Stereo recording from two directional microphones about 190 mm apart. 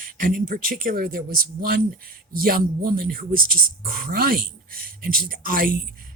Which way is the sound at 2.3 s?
50° right (ahead or behind).